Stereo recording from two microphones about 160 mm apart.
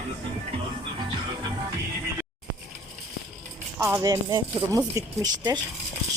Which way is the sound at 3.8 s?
15° right (ahead or behind).